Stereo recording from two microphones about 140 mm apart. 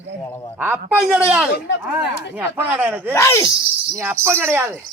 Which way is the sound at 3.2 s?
20° left (ahead or behind).